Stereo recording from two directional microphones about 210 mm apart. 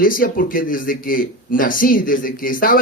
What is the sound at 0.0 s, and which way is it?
Speech, 40° left (ahead or behind).